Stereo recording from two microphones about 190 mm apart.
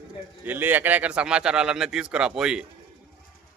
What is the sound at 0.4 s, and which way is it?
A man's voice, 10° right (ahead or behind).